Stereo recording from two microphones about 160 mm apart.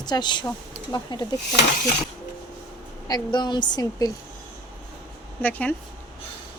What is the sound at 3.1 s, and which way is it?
A woman's voice, 25° left (ahead or behind).